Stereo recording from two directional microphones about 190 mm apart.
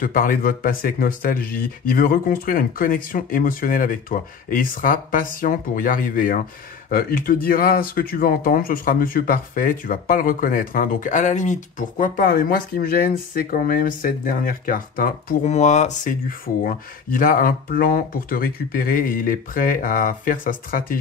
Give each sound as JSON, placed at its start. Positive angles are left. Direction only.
{"t": 0.0, "sound": "speech", "side_deg": 45}